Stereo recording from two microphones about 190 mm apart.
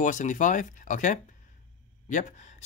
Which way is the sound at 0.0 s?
40° left (ahead or behind).